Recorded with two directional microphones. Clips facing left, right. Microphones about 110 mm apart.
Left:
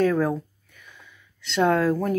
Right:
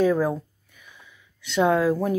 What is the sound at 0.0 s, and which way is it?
Speech, 10° right (ahead or behind).